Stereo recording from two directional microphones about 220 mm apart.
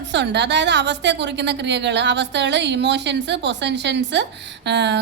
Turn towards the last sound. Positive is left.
turn(degrees=-50)  # may be behind; listen again after turning